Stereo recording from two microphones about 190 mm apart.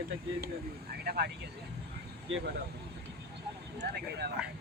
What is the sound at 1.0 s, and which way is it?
Speech, 55° right (ahead or behind).